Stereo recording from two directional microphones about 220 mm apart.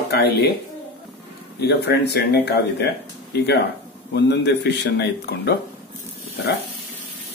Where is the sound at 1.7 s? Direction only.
50° left (ahead or behind).